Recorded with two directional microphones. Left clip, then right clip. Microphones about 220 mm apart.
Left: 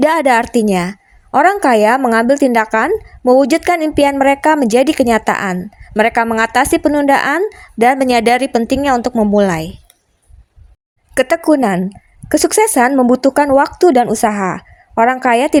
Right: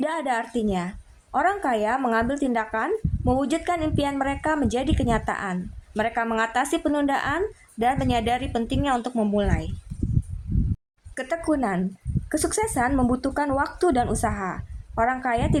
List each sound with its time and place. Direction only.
0.0 s speech: 40° left (ahead or behind)
11.1 s speech: 35° left (ahead or behind)